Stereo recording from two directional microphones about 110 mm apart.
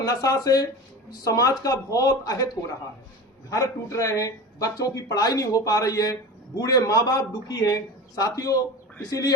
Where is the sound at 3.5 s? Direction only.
30° left (ahead or behind).